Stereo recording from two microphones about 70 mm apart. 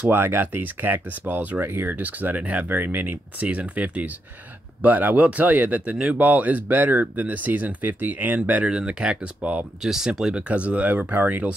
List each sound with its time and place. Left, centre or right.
0.0 s speech: right
9.8 s speech: centre; by 11.5 s right